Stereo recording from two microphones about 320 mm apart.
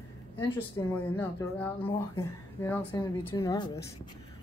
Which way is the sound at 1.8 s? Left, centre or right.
Centre.